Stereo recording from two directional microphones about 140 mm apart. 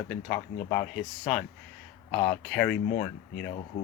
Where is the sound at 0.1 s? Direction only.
10° left (ahead or behind).